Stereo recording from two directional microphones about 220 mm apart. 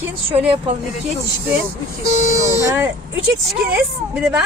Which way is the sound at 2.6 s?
10° right (ahead or behind).